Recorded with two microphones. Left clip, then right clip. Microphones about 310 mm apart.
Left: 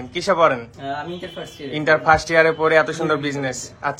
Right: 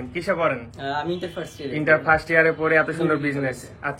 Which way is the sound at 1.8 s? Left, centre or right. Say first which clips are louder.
Left 3 dB; centre.